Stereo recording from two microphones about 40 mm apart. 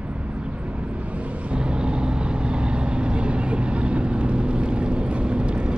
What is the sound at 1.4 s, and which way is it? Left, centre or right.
Vehicle, right.